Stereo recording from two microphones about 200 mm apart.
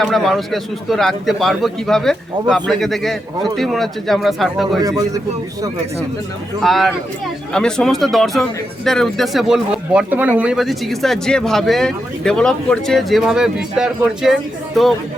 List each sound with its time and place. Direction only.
0.0 s speech: centre (ahead or behind)
4.8 s a man's voice: 15° right (ahead or behind)
6.6 s speech: centre (ahead or behind)